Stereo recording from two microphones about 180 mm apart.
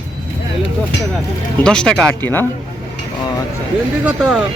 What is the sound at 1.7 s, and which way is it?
Speech, 5° left (ahead or behind).